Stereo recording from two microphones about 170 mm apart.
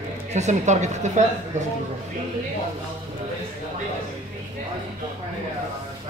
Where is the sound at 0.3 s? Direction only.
40° right (ahead or behind).